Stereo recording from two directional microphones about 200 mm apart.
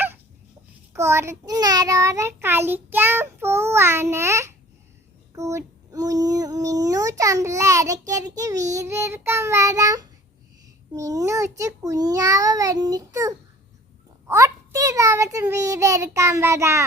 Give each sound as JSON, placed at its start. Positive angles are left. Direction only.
{"t": 0.9, "sound": "child singing", "side_deg": -15}